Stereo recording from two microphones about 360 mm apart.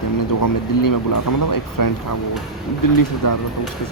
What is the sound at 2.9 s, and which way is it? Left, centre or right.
Speech, left.